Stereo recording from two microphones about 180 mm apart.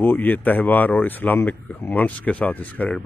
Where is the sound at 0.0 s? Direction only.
10° left (ahead or behind).